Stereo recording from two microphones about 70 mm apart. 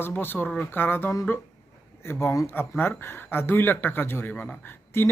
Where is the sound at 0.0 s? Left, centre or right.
Left.